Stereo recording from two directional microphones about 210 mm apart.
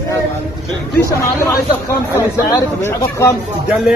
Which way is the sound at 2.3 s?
15° left (ahead or behind).